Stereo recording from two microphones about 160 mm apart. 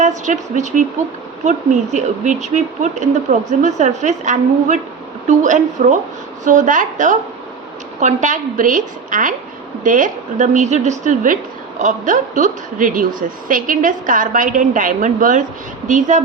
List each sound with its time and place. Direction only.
0.0 s a woman's voice: 50° right (ahead or behind)